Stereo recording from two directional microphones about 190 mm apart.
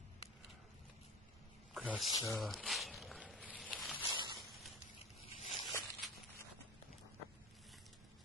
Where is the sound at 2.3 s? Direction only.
Centre (ahead or behind).